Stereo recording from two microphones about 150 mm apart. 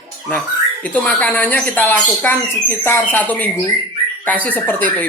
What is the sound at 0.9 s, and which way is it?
Speech, 10° left (ahead or behind).